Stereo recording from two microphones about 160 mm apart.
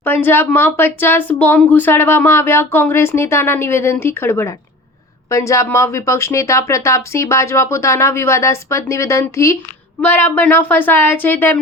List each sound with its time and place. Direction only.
0.0 s speech: 15° left (ahead or behind)